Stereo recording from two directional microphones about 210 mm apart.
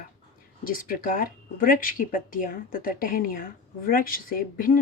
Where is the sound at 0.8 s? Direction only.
40° left (ahead or behind).